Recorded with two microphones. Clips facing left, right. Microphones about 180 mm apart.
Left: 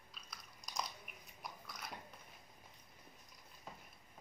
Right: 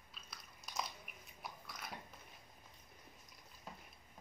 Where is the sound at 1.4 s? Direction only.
Centre (ahead or behind).